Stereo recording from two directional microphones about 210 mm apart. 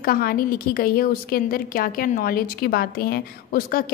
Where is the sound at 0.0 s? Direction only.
45° left (ahead or behind).